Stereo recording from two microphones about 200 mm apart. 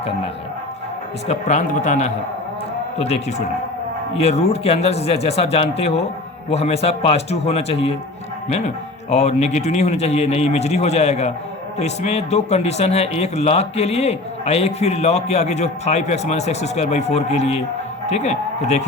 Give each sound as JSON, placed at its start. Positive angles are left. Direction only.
{"t": 1.3, "sound": "a man's voice", "side_deg": 35}